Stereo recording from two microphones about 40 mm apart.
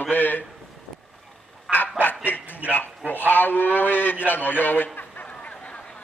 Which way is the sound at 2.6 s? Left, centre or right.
Left.